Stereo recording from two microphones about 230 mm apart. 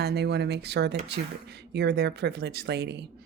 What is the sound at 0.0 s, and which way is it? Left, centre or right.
Speech, right.